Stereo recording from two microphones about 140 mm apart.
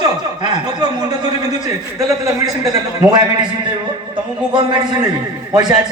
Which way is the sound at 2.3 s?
25° right (ahead or behind).